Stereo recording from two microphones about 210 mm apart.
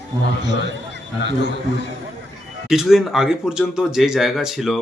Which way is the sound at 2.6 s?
Centre (ahead or behind).